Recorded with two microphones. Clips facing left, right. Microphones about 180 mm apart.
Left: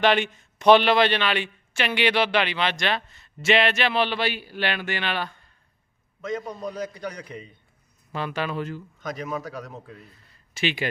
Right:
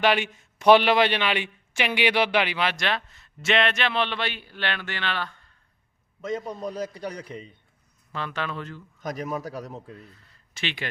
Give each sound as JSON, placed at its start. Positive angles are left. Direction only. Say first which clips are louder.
{"t": 0.0, "sound": "speech", "louder": "left 2 dB", "side_deg": -5}
{"t": 6.7, "sound": "a man's voice", "louder": "even", "side_deg": -30}
{"t": 8.1, "sound": "speech", "louder": "left 3 dB", "side_deg": 10}
{"t": 9.0, "sound": "a man's voice", "louder": "right 2 dB", "side_deg": -40}
{"t": 9.7, "sound": "speech", "louder": "right 1 dB", "side_deg": 10}